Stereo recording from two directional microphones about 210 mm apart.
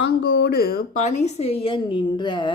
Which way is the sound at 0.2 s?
55° left (ahead or behind).